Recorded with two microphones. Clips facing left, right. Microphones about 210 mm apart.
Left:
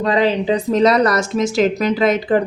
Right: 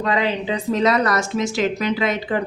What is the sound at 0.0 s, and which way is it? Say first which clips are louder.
Speech: left 5 dB; 35° left (ahead or behind).